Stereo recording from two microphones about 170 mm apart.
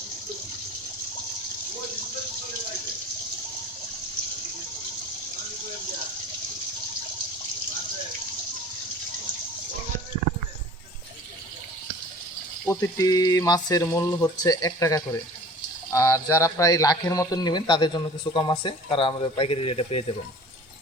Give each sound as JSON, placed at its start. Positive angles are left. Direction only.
{"t": 12.6, "sound": "speech", "side_deg": 20}